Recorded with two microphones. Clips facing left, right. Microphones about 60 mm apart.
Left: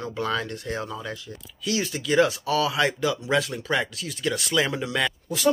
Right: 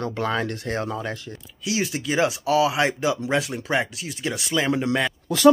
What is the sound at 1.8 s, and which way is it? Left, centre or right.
Speech, centre.